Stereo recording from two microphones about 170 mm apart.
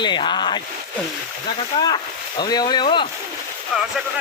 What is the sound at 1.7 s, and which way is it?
Speech, 30° left (ahead or behind).